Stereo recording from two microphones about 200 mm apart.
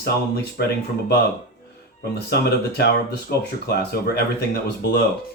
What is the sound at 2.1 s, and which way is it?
Speech, 50° left (ahead or behind).